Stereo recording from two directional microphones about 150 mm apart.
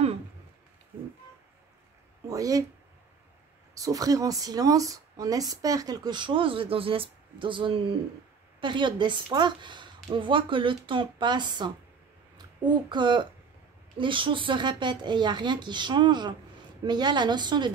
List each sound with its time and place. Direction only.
2.2 s speech: 20° right (ahead or behind)
3.7 s a woman's voice: 25° right (ahead or behind)